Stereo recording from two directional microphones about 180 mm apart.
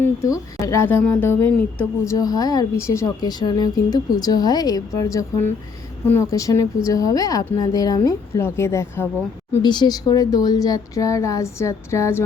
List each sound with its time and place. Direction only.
0.0 s a woman's voice: 15° left (ahead or behind)